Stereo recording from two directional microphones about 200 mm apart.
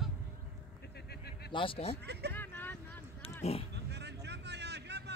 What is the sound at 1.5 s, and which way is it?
Speech, 25° left (ahead or behind).